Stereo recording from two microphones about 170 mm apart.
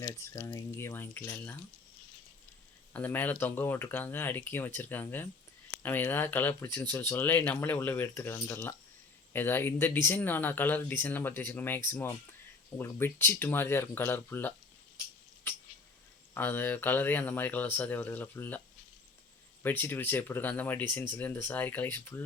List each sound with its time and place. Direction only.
0.0 s speech: 20° left (ahead or behind)
2.9 s speech: 10° left (ahead or behind)
15.5 s cat: 10° left (ahead or behind)
16.3 s speech: 10° left (ahead or behind)
19.6 s speech: 10° left (ahead or behind)